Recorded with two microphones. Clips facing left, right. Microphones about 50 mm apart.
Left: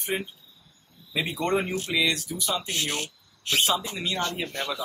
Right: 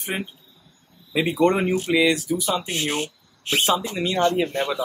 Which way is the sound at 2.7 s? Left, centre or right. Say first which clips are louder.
Right 4 dB; right.